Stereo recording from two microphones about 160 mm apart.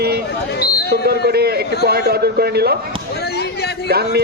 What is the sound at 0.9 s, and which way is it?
A man's voice, 80° right.